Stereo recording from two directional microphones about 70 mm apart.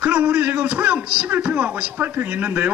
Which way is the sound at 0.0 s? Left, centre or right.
Centre.